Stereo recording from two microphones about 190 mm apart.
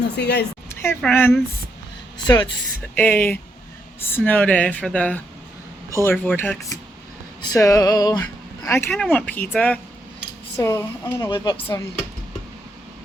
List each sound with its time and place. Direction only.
0.2 s speech: 60° left (ahead or behind)
0.7 s speech: 15° left (ahead or behind)
2.1 s speech: 25° left (ahead or behind)
2.9 s speech: 10° left (ahead or behind)
8.9 s speech: 5° left (ahead or behind)
11.3 s speech: 25° left (ahead or behind)